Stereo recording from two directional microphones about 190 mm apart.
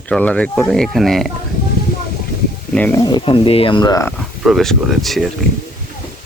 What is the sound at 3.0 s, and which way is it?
Speech, 25° left (ahead or behind).